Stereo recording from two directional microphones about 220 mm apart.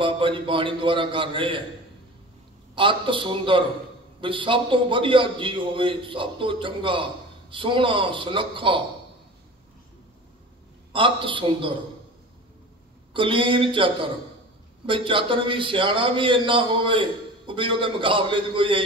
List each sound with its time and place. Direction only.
0.0 s a man's voice: 25° right (ahead or behind)
2.7 s a man's voice: 20° right (ahead or behind)
10.9 s a man's voice: 25° right (ahead or behind)
13.1 s a man's voice: 25° right (ahead or behind)